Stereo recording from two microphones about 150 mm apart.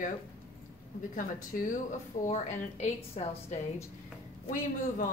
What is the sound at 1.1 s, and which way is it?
Speech, 60° left (ahead or behind).